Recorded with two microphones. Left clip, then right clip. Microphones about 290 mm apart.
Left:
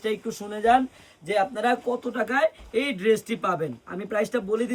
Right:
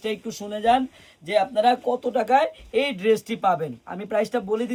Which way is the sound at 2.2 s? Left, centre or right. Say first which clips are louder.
Right 2 dB; right.